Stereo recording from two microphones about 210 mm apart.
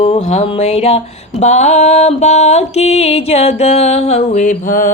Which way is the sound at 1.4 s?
35° left (ahead or behind).